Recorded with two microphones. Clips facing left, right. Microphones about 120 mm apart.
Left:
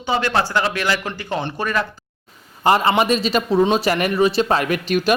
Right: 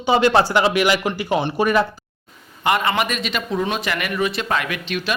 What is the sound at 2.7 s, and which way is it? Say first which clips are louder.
Speech: left 4 dB; 30° left (ahead or behind).